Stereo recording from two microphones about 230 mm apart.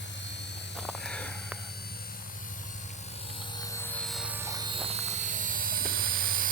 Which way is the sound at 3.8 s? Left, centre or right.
Centre.